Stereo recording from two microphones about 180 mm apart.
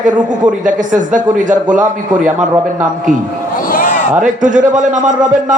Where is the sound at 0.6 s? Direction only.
45° right (ahead or behind).